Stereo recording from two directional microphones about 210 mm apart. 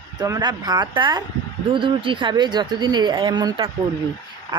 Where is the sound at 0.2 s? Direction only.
20° right (ahead or behind).